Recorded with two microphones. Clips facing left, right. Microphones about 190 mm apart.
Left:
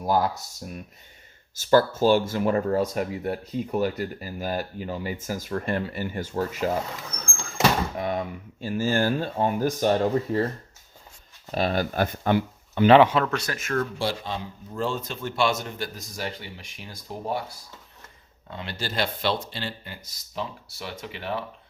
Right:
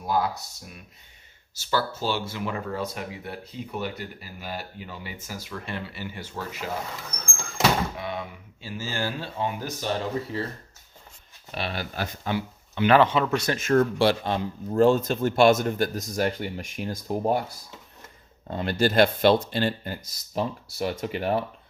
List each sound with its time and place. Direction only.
0.0 s speech: 40° left (ahead or behind)
1.7 s speech: 45° left (ahead or behind)
7.9 s speech: 45° left (ahead or behind)
11.5 s speech: 45° left (ahead or behind)
13.2 s speech: centre (ahead or behind)
13.5 s speech: 30° right (ahead or behind)
14.0 s speech: 70° right (ahead or behind)
14.7 s speech: 45° right (ahead or behind)
18.5 s speech: 45° right (ahead or behind)